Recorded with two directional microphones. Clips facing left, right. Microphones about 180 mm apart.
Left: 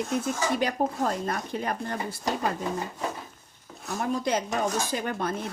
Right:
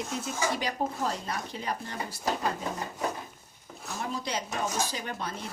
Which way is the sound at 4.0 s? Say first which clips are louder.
Left 7 dB; 50° left (ahead or behind).